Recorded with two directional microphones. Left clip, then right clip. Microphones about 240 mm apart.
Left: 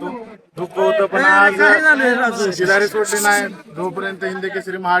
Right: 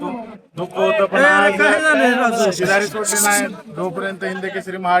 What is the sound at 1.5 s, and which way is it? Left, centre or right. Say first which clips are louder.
A man's voice: left 2 dB; right.